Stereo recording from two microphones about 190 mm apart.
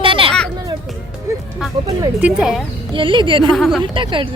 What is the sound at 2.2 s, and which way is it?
Speech, 5° right (ahead or behind).